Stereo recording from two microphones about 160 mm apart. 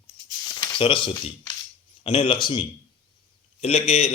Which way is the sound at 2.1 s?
30° left (ahead or behind).